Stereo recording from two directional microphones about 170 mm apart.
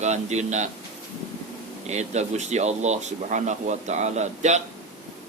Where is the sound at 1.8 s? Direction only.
40° right (ahead or behind).